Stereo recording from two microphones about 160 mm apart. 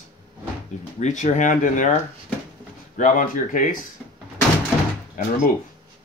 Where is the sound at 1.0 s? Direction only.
50° left (ahead or behind).